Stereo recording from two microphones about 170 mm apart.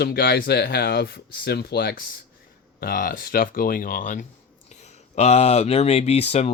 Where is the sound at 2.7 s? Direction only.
55° left (ahead or behind); by 6.5 s 40° left (ahead or behind).